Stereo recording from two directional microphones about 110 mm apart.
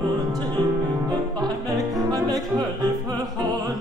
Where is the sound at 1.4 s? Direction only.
35° right (ahead or behind).